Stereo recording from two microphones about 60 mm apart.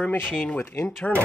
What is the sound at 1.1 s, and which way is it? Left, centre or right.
Speech, centre.